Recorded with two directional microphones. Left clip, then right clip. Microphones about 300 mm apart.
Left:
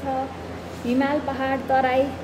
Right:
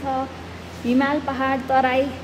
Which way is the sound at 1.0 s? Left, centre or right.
Right.